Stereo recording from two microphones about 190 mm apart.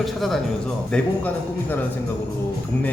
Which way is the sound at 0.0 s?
Centre (ahead or behind).